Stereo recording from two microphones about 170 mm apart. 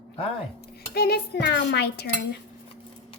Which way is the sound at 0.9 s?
70° left (ahead or behind).